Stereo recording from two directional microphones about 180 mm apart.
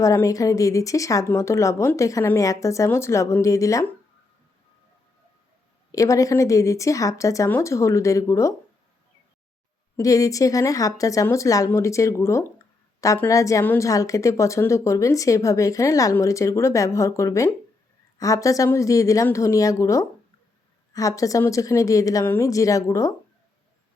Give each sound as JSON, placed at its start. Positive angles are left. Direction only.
{"t": 0.0, "sound": "a woman's voice", "side_deg": 20}
{"t": 5.9, "sound": "a woman's voice", "side_deg": 20}
{"t": 10.0, "sound": "a woman's voice", "side_deg": 20}